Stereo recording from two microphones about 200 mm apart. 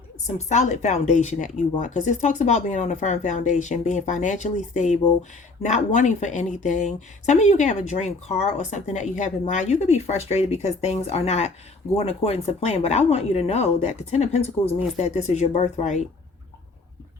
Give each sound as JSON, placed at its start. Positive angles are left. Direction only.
{"t": 0.3, "sound": "speech", "side_deg": 35}